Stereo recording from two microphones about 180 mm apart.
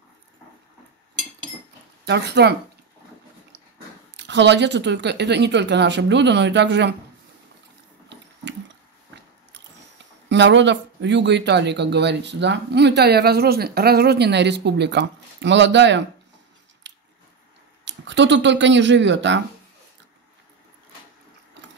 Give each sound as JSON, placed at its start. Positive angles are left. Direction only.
{"t": 2.0, "sound": "speech", "side_deg": -70}
{"t": 4.2, "sound": "speech", "side_deg": -75}
{"t": 10.3, "sound": "speech", "side_deg": -80}
{"t": 16.8, "sound": "chewing", "side_deg": -80}
{"t": 17.8, "sound": "speech", "side_deg": -80}